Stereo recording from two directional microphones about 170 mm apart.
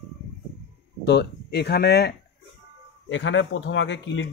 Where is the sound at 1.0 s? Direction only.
80° left.